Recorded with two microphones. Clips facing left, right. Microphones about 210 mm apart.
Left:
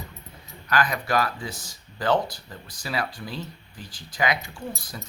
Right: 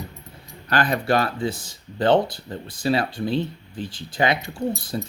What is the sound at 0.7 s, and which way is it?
Speech, 30° right (ahead or behind).